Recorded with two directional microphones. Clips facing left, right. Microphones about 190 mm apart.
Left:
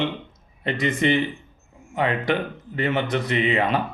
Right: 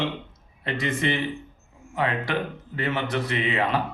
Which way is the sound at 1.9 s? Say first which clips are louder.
Left 3 dB; 20° left (ahead or behind).